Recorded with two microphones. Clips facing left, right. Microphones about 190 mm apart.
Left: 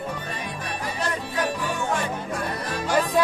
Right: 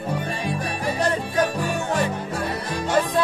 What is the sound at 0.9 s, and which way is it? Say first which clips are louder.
Music: right 6 dB; 40° right (ahead or behind).